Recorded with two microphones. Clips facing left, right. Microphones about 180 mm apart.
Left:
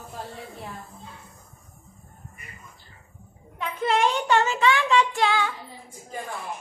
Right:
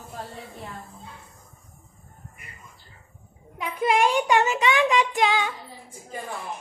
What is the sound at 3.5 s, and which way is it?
Child singing, 10° right (ahead or behind).